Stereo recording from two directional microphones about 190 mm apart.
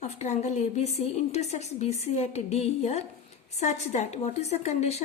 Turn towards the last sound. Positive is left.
turn(degrees=35)  # may be behind; listen again after turning